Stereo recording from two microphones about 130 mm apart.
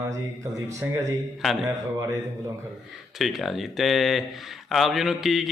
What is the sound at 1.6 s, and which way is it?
Speech, 25° right (ahead or behind).